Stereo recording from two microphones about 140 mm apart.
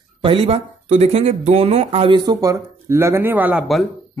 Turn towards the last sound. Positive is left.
turn(degrees=-10)  # may be behind; listen again after turning